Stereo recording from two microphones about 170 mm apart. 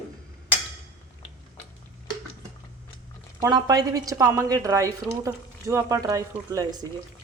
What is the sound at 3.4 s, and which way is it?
Speech, 20° right (ahead or behind).